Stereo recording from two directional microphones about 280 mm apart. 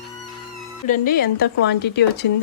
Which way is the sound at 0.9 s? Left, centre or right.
Left.